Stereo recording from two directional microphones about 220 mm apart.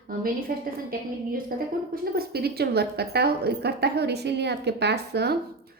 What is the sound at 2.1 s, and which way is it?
A woman's voice, 45° right (ahead or behind).